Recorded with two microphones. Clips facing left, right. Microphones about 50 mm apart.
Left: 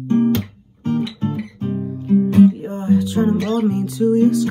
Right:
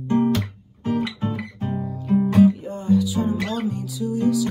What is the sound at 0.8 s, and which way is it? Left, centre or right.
Guitar, centre.